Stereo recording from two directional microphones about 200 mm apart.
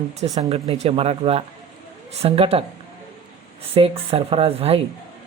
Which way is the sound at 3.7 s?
30° right (ahead or behind).